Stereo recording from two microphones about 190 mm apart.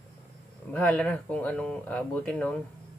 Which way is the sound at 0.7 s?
5° left (ahead or behind).